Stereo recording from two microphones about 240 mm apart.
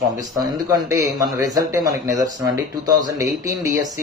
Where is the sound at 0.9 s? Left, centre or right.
Centre.